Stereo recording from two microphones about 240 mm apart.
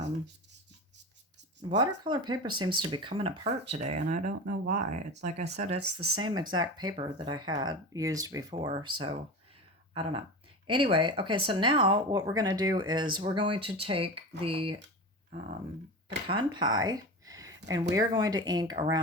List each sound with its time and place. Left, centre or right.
1.7 s speech: centre
5.7 s speech: right
6.1 s speech: centre
9.9 s speech: right
16.3 s speech: centre